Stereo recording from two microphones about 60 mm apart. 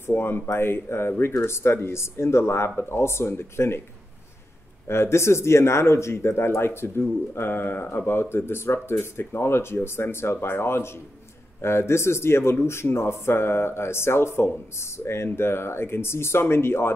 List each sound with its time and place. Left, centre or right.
0.0 s speech: left
4.8 s speech: left